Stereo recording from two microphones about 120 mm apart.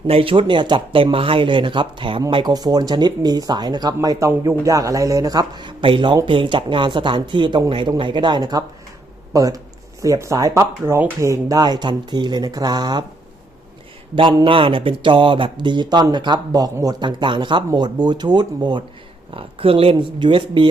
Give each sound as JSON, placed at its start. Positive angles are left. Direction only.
{"t": 0.1, "sound": "a man's voice", "side_deg": -50}
{"t": 14.4, "sound": "speech", "side_deg": -45}
{"t": 19.3, "sound": "speech", "side_deg": -50}